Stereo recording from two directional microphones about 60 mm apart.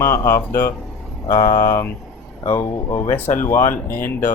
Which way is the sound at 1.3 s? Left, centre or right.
Left.